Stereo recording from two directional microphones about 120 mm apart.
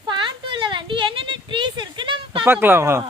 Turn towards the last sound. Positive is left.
turn(degrees=-20)  # may be behind; listen again after turning